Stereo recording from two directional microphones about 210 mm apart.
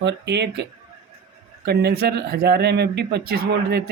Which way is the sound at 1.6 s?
50° right (ahead or behind).